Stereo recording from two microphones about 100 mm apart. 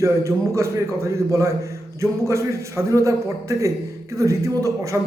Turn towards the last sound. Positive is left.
turn(degrees=-30)  # may be behind; listen again after turning